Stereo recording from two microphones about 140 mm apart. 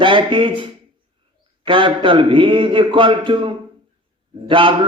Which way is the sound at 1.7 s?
35° right (ahead or behind).